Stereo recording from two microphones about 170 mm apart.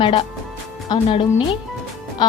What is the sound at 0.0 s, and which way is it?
Speech, 30° left (ahead or behind).